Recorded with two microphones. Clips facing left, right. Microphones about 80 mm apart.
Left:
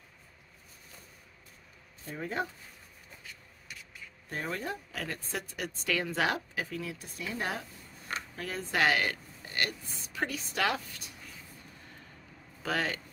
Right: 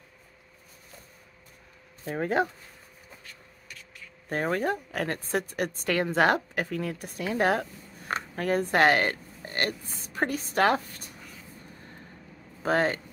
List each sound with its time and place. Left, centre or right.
2.0 s speech: right
4.3 s speech: right
8.1 s speech: right
12.6 s speech: right